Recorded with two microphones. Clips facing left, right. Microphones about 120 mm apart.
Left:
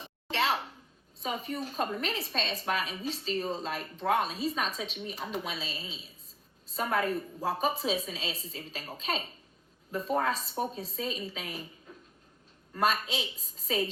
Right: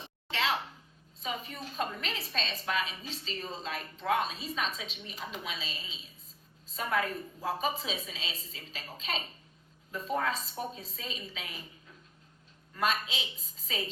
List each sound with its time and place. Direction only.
1.2 s a woman's voice: 45° left (ahead or behind)
12.7 s a woman's voice: 40° left (ahead or behind)